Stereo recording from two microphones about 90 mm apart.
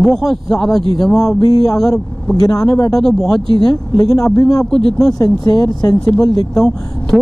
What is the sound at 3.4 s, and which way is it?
Speech, 70° right (ahead or behind).